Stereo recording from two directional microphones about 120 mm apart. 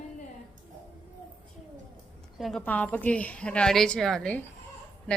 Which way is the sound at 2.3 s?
Centre (ahead or behind).